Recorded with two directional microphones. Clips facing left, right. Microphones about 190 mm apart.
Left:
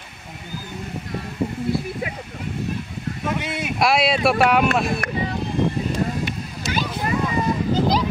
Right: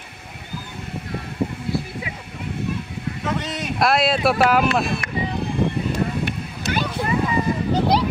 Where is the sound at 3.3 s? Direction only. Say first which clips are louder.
Even; 5° left (ahead or behind).